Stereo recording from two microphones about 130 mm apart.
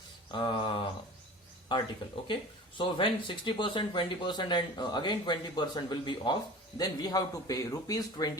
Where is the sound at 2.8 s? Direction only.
40° left (ahead or behind).